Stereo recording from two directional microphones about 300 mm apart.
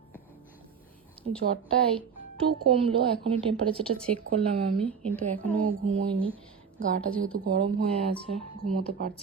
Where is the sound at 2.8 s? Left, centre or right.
Centre.